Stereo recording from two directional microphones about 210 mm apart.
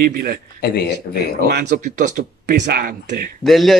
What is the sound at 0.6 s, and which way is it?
Speech, 50° left (ahead or behind).